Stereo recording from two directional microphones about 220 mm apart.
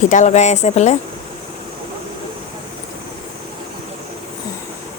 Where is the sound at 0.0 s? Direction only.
35° left (ahead or behind).